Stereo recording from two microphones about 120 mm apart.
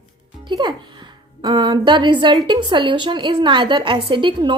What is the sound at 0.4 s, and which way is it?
A child's voice, 40° right (ahead or behind).